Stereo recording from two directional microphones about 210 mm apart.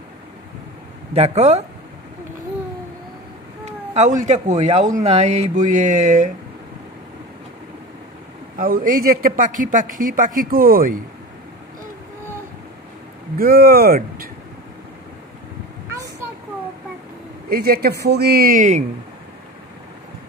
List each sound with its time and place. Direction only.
1.1 s speech: 30° right (ahead or behind)
3.6 s speech: 35° right (ahead or behind)
8.5 s speech: 40° right (ahead or behind)
13.4 s a man's voice: 45° right (ahead or behind)
17.5 s a man's voice: 45° right (ahead or behind)